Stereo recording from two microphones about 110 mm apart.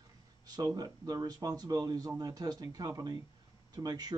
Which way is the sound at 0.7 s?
35° right (ahead or behind).